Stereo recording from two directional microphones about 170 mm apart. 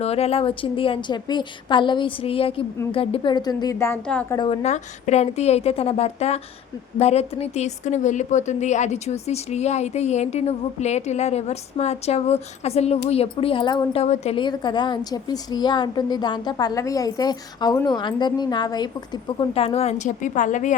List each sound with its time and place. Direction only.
0.0 s a woman's voice: 35° left (ahead or behind); by 3.9 s 20° left (ahead or behind)
4.0 s a woman's voice: 5° left (ahead or behind)
4.4 s a woman's voice: 40° left (ahead or behind)
14.0 s a woman's voice: 40° left (ahead or behind)
14.4 s a woman's voice: 25° left (ahead or behind); by 20.7 s 45° left (ahead or behind)